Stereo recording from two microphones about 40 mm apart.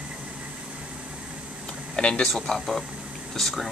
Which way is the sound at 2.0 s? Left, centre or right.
Left.